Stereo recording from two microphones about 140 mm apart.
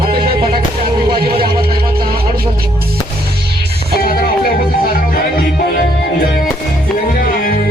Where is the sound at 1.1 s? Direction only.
90° right.